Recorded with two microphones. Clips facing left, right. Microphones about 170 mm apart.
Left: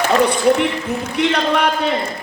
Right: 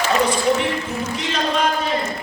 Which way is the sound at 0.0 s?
60° left (ahead or behind).